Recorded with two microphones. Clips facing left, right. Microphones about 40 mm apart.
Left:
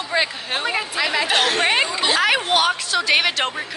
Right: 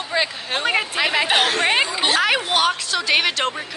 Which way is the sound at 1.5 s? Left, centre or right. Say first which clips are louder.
Even; centre.